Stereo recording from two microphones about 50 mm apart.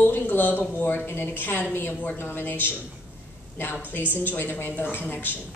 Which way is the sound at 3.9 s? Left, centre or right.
Left.